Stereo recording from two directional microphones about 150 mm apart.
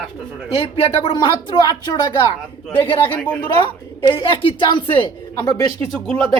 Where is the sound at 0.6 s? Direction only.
40° left (ahead or behind).